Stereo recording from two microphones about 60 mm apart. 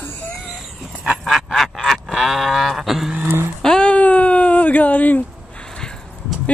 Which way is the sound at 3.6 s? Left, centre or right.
Centre.